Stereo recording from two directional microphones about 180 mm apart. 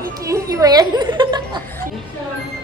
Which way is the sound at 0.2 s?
15° right (ahead or behind).